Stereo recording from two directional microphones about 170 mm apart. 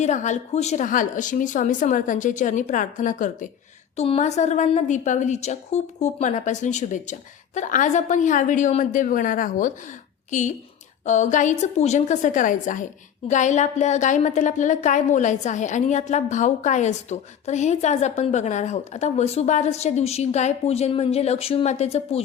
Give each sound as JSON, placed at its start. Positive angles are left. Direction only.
{"t": 0.0, "sound": "a woman's voice", "side_deg": 45}
{"t": 3.9, "sound": "a woman's voice", "side_deg": 40}
{"t": 11.0, "sound": "a woman's voice", "side_deg": 45}